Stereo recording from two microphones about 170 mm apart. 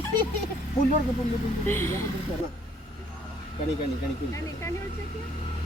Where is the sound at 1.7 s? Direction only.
15° left (ahead or behind).